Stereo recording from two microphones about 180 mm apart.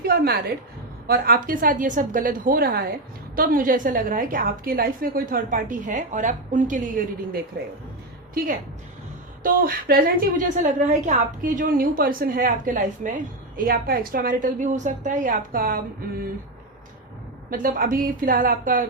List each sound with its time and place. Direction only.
0.0 s a woman's voice: 55° right (ahead or behind)
9.4 s a woman's voice: 55° right (ahead or behind)
17.5 s a woman's voice: 50° right (ahead or behind)